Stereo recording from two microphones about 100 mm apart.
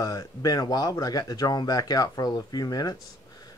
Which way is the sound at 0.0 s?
35° left (ahead or behind).